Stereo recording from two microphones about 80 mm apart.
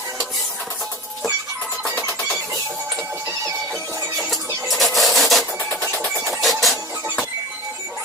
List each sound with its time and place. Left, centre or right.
4.7 s filing: centre
5.8 s music: left
6.4 s a sound: centre